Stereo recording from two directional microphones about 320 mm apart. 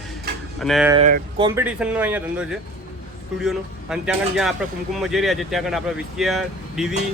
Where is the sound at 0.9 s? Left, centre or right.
Right.